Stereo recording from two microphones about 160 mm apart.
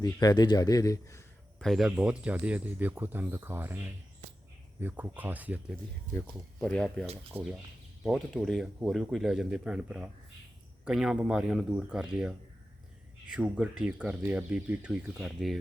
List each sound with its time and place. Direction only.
0.0 s speech: 25° left (ahead or behind)
1.5 s speech: centre (ahead or behind)
4.8 s speech: 10° right (ahead or behind)
6.1 s speech: 10° left (ahead or behind)
7.3 s speech: 10° right (ahead or behind)
8.0 s speech: centre (ahead or behind)
13.3 s speech: 5° right (ahead or behind)